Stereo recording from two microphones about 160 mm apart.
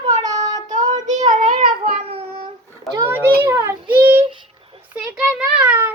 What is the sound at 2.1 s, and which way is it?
Child singing, 35° right (ahead or behind).